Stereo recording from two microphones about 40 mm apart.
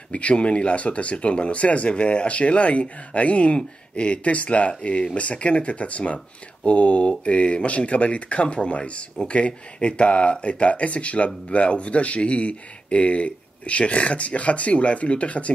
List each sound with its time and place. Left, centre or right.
0.1 s speech: left